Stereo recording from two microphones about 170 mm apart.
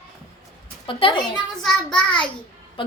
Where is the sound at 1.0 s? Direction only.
30° left (ahead or behind).